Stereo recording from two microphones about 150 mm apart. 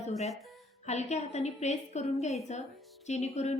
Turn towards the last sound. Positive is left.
turn(degrees=50)  # may be behind; listen again after turning